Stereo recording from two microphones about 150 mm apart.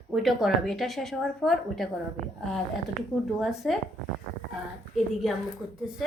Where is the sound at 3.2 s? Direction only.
Centre (ahead or behind).